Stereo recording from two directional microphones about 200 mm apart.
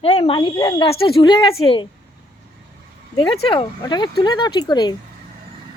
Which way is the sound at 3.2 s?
25° left (ahead or behind).